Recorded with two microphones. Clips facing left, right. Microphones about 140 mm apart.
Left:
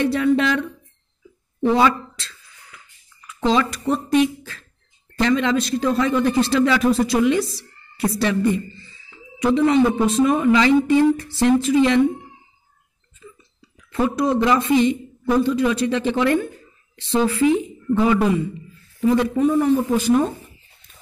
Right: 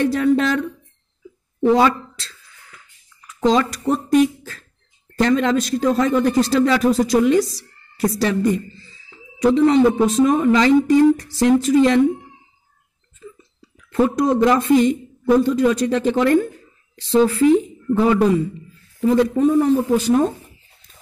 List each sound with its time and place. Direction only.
0.0 s speech: 40° right (ahead or behind)
1.6 s speech: 40° right (ahead or behind)
3.4 s a man's voice: 40° right (ahead or behind)
13.6 s a man's voice: 45° right (ahead or behind)